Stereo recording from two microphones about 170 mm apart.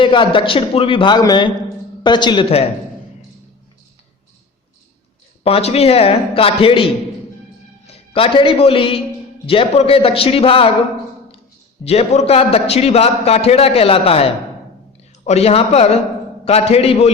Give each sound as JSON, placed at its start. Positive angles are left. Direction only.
{"t": 0.0, "sound": "a man's voice", "side_deg": 30}
{"t": 5.4, "sound": "a man's voice", "side_deg": 35}
{"t": 11.9, "sound": "a man's voice", "side_deg": 35}
{"t": 15.3, "sound": "a man's voice", "side_deg": 35}